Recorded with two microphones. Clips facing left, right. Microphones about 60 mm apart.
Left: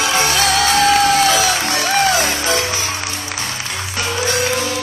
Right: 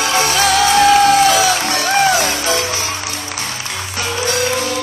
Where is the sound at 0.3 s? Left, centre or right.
Right.